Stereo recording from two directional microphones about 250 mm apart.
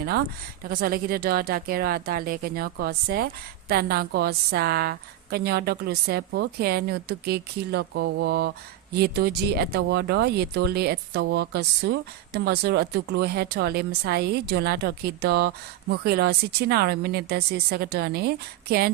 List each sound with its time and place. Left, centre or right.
0.0 s a woman's voice: right